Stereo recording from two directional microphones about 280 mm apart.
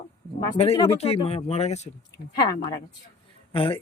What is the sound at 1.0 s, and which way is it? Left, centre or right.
Speech, left.